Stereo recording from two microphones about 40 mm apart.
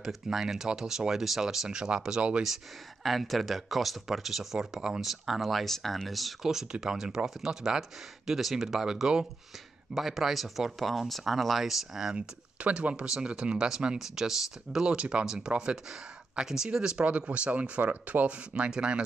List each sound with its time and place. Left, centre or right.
0.0 s speech: centre
2.0 s speech: right
2.4 s speech: centre
6.4 s speech: centre
12.2 s speech: right
13.9 s speech: centre
14.9 s speech: right
17.0 s speech: right
18.6 s speech: right